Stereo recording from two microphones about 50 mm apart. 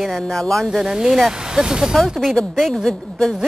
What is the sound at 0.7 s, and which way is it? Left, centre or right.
Speech, centre.